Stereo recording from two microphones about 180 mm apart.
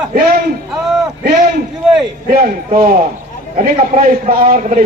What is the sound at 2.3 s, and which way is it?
Speech, 55° right (ahead or behind).